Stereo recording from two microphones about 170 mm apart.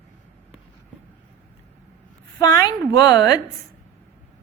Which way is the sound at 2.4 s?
20° left (ahead or behind).